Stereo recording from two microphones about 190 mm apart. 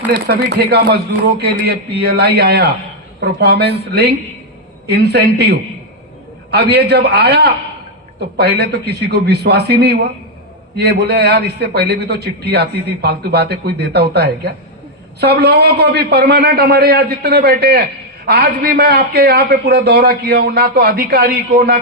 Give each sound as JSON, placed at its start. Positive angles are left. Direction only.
{"t": 0.3, "sound": "a man's voice", "side_deg": -55}